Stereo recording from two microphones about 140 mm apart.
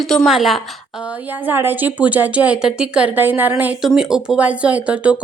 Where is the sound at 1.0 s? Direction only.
15° right (ahead or behind).